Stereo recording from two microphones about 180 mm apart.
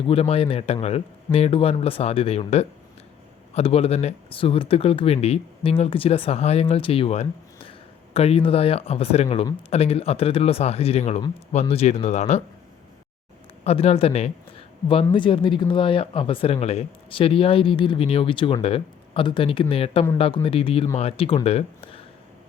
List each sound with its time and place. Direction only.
0.1 s speech: 35° left (ahead or behind)
13.7 s speech: 35° left (ahead or behind)